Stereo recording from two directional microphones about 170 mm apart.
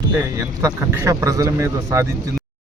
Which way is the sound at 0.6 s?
15° right (ahead or behind).